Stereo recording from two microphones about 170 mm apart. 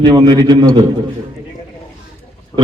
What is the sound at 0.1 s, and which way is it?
Speech, 25° right (ahead or behind).